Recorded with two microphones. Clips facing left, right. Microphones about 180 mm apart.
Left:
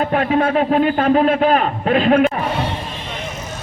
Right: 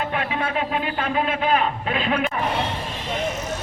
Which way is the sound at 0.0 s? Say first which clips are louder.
Left 9 dB; 45° left (ahead or behind).